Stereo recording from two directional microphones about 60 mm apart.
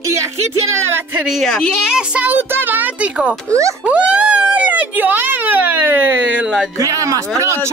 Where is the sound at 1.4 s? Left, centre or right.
Centre.